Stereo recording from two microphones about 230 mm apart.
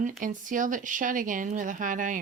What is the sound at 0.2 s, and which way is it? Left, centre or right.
Speech, right.